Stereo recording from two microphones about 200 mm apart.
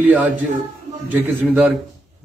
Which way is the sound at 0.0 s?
5° right (ahead or behind).